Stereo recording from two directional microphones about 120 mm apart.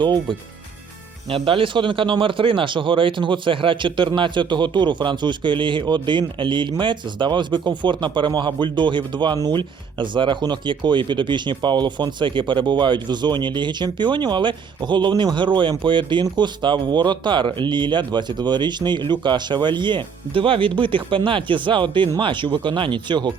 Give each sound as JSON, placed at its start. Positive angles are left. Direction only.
{"t": 0.0, "sound": "speech", "side_deg": -40}